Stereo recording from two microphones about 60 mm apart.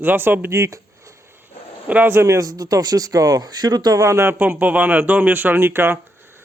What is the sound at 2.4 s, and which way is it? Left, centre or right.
Speech, right.